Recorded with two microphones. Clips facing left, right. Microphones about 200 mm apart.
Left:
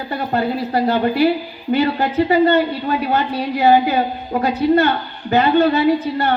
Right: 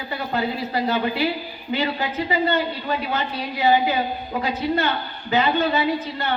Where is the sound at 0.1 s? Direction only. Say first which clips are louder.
Left 5 dB; 55° left (ahead or behind).